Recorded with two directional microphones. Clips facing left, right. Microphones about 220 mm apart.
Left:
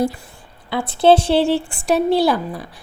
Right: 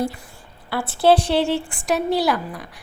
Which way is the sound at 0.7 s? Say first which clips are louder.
Left 3 dB; 20° left (ahead or behind).